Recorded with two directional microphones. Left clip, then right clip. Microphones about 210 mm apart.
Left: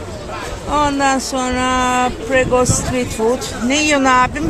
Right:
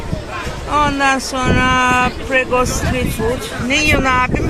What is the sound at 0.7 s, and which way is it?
Speech, 15° left (ahead or behind).